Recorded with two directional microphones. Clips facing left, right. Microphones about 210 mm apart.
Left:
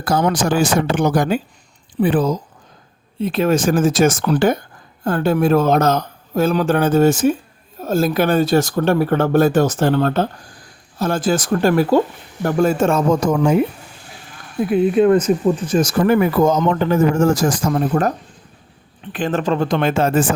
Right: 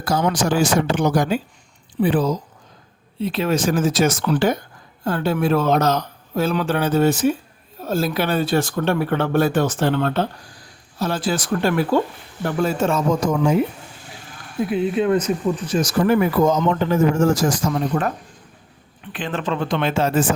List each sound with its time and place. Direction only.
0.0 s speech: 50° left (ahead or behind)
14.7 s speech: 50° left (ahead or behind)
19.1 s speech: 45° left (ahead or behind)